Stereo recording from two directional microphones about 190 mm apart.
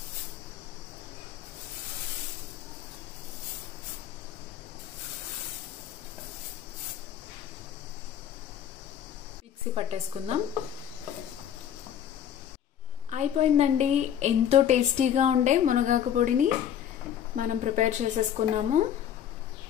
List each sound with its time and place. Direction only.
9.8 s a woman's voice: 30° right (ahead or behind)
13.1 s a woman's voice: 35° right (ahead or behind)